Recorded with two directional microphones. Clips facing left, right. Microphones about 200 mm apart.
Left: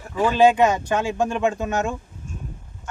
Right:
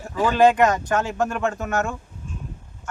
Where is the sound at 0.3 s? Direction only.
5° left (ahead or behind).